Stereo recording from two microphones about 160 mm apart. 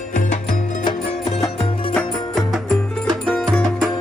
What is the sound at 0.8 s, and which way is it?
Music, 40° left (ahead or behind).